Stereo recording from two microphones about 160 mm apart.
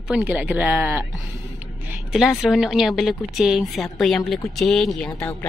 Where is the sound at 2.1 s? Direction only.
Centre (ahead or behind).